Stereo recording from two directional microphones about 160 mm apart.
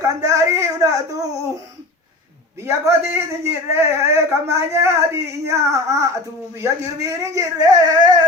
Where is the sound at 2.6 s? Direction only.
15° right (ahead or behind).